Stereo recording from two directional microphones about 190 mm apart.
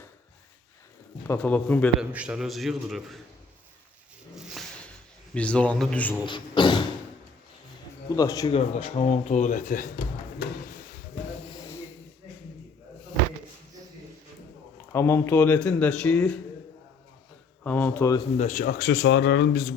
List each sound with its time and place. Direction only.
1.3 s speech: 10° left (ahead or behind)
2.0 s a man's voice: 5° right (ahead or behind)
5.3 s a man's voice: 5° left (ahead or behind)
6.2 s beatboxing: 25° left (ahead or behind)
8.1 s a man's voice: 20° left (ahead or behind)
8.5 s speech: 35° left (ahead or behind)
14.9 s speech: 15° left (ahead or behind)
17.6 s speech: 10° left (ahead or behind)
18.3 s a man's voice: 40° left (ahead or behind); by 19.7 s 65° left (ahead or behind)